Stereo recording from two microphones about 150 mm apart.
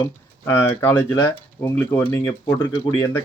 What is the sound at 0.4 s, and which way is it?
Speech, 15° left (ahead or behind).